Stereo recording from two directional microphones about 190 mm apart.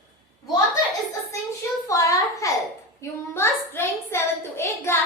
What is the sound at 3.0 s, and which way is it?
Child singing, 15° left (ahead or behind).